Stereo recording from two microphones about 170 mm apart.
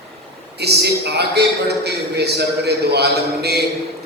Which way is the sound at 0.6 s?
75° right (ahead or behind).